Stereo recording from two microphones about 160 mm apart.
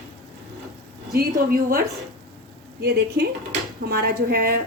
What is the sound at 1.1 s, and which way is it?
Speech, 70° right (ahead or behind).